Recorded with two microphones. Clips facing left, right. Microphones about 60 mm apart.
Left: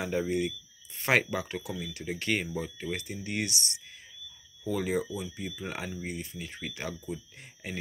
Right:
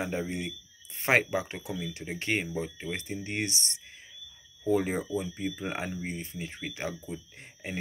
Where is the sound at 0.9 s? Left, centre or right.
Right.